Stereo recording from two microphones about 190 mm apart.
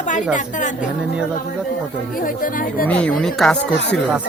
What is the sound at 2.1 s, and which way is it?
Speech, 50° left (ahead or behind).